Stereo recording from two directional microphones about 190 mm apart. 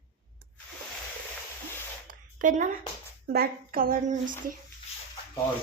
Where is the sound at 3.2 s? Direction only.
55° right (ahead or behind).